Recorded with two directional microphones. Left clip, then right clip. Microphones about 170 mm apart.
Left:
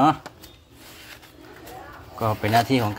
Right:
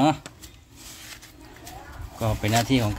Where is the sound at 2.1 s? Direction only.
20° right (ahead or behind).